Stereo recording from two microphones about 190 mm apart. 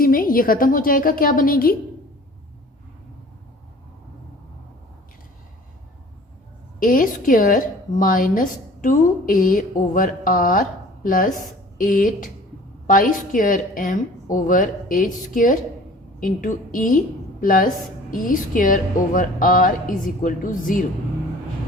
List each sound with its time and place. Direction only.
0.0 s a woman's voice: 50° left (ahead or behind)
6.7 s a woman's voice: 45° left (ahead or behind)